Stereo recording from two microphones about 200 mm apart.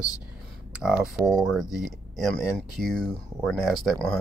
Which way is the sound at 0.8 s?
5° right (ahead or behind).